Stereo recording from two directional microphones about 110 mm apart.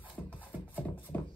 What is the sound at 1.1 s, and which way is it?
Music, 20° left (ahead or behind).